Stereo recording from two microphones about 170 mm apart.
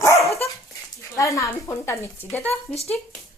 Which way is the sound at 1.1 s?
20° left (ahead or behind).